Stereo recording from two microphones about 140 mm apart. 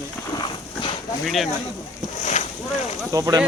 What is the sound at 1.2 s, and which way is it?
Speech, centre (ahead or behind).